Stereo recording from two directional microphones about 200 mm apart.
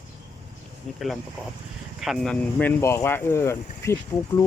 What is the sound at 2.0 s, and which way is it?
Speech, centre (ahead or behind).